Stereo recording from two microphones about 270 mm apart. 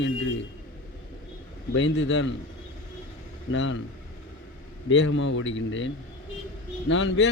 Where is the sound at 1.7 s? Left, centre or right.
Left.